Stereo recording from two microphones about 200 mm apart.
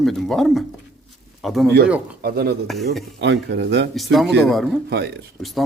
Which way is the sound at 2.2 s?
50° right (ahead or behind).